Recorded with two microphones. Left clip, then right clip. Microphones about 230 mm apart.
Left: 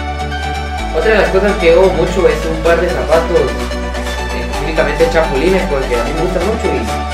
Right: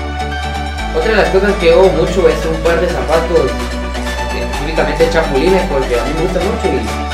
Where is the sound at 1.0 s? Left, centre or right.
Centre.